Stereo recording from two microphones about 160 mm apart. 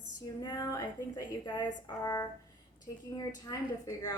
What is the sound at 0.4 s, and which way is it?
A woman's voice, 20° left (ahead or behind).